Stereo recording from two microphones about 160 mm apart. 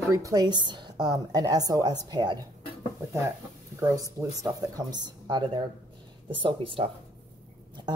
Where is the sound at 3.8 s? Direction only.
20° right (ahead or behind).